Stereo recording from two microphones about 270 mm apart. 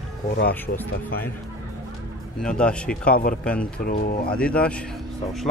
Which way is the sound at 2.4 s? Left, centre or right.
Centre.